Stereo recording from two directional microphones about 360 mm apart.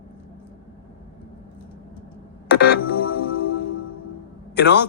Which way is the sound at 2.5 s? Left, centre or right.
Left.